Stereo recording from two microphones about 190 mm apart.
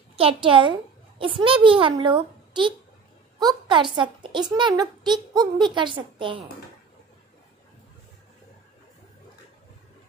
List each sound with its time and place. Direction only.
0.1 s a child's voice: 30° right (ahead or behind)